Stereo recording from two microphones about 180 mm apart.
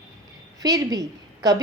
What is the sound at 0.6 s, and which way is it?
Speech, 20° right (ahead or behind).